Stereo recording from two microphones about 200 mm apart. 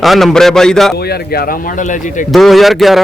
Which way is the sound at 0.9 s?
50° left (ahead or behind).